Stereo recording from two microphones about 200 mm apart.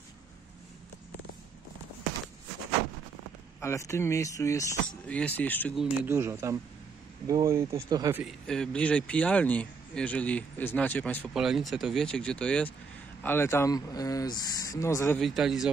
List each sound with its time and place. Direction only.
3.6 s a man's voice: 15° left (ahead or behind)
5.8 s speech: 10° right (ahead or behind)
8.2 s a man's voice: centre (ahead or behind)
15.1 s speech: centre (ahead or behind)